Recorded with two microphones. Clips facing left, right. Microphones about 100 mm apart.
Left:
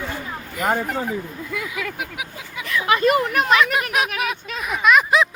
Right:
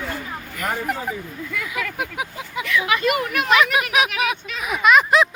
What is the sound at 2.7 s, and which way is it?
Speech, 35° left (ahead or behind).